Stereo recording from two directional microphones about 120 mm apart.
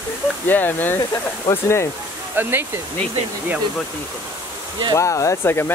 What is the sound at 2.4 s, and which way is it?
Speech, 15° right (ahead or behind).